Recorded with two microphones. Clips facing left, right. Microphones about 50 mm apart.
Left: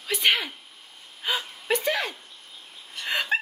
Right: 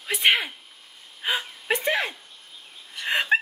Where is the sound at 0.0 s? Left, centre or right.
Right.